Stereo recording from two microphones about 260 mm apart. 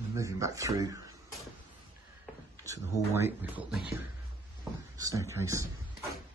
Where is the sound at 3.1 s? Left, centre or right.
Centre.